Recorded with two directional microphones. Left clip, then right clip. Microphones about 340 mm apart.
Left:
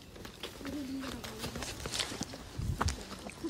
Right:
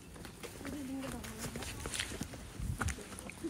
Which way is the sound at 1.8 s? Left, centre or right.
Centre.